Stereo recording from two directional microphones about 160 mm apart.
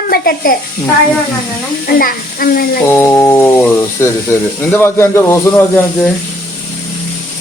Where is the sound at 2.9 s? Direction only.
15° left (ahead or behind).